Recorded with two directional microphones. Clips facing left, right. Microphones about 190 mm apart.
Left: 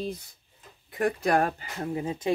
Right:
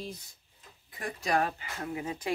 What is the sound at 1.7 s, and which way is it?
Speech, 30° left (ahead or behind).